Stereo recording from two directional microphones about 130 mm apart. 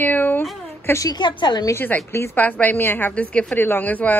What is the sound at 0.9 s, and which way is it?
Speech, 25° left (ahead or behind).